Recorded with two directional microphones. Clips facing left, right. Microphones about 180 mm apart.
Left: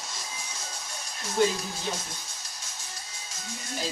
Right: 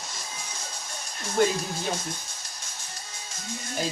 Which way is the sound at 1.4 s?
55° right (ahead or behind).